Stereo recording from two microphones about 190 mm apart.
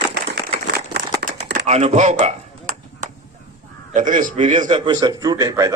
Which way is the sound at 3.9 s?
40° right (ahead or behind).